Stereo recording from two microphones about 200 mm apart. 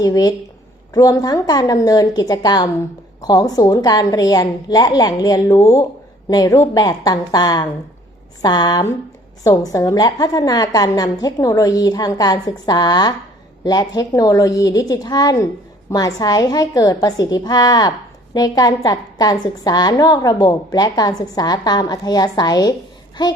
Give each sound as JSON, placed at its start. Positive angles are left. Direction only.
{"t": 0.0, "sound": "a woman's voice", "side_deg": 20}